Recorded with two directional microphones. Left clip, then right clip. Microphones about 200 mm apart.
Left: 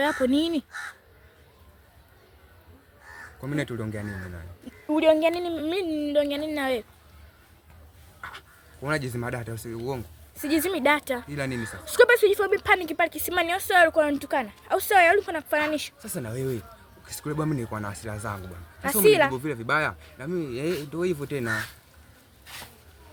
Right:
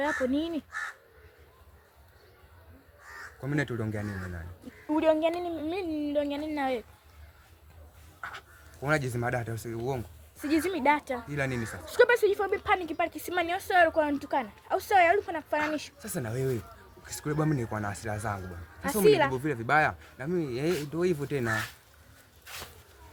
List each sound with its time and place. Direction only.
0.3 s a woman's voice: 50° left (ahead or behind)
3.4 s speech: centre (ahead or behind)
4.9 s a woman's voice: 45° left (ahead or behind)
8.2 s speech: centre (ahead or behind)
10.3 s a woman's voice: 35° left (ahead or behind)
11.3 s speech: centre (ahead or behind)
11.9 s a woman's voice: 40° left (ahead or behind)
16.0 s speech: 5° right (ahead or behind)
19.0 s a woman's voice: 35° left (ahead or behind)
19.3 s speech: centre (ahead or behind)
22.5 s speech: 15° right (ahead or behind)